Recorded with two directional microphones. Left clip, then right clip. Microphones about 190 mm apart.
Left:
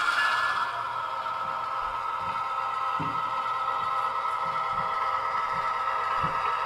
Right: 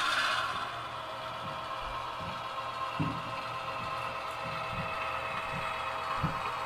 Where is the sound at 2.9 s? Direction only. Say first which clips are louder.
Left 8 dB; 25° right (ahead or behind).